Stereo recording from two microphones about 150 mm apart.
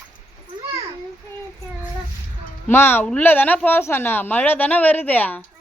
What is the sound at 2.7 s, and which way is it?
A woman's voice, 15° left (ahead or behind).